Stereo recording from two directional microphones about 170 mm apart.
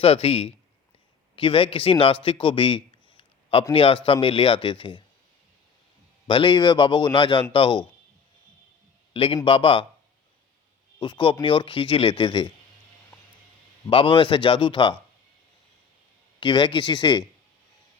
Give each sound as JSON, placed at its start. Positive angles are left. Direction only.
{"t": 0.0, "sound": "speech", "side_deg": 35}
{"t": 6.2, "sound": "speech", "side_deg": 30}
{"t": 9.1, "sound": "speech", "side_deg": 30}
{"t": 11.0, "sound": "speech", "side_deg": 30}
{"t": 13.8, "sound": "speech", "side_deg": 30}
{"t": 16.4, "sound": "speech", "side_deg": 25}